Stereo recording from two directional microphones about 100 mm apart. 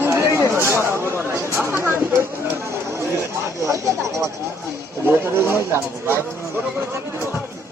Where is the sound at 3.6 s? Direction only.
30° right (ahead or behind).